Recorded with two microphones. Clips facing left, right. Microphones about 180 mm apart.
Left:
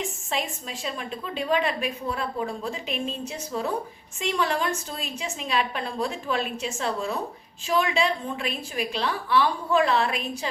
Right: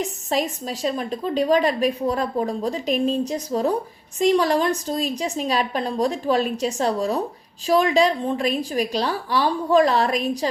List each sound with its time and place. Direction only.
0.0 s a woman's voice: 40° right (ahead or behind)